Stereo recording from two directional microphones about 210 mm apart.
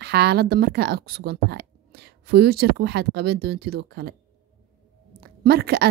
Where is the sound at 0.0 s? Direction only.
50° right (ahead or behind).